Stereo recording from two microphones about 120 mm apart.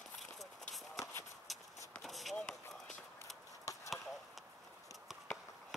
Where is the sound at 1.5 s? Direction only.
Centre (ahead or behind).